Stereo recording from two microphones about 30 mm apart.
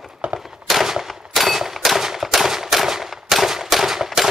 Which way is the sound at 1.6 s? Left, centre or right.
Centre.